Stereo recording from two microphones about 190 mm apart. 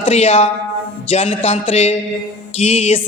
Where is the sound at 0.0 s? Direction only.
35° left (ahead or behind).